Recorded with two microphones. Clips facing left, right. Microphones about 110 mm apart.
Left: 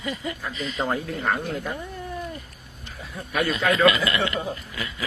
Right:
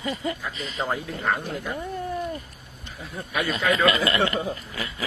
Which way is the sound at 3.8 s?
35° right (ahead or behind).